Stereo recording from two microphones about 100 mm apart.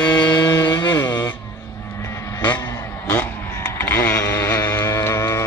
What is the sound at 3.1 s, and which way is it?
Vehicle, 20° left (ahead or behind).